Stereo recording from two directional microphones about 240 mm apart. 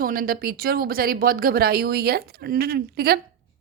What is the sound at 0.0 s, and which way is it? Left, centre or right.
A woman's voice, right.